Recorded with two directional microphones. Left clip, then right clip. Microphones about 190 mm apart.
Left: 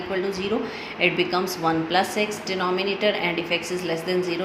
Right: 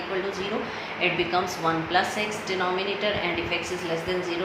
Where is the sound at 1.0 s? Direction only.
50° left (ahead or behind).